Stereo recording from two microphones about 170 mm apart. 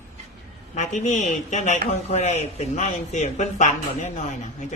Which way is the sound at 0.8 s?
45° left (ahead or behind).